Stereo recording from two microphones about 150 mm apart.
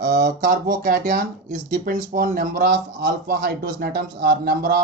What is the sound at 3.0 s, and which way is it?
A man's voice, 90° right.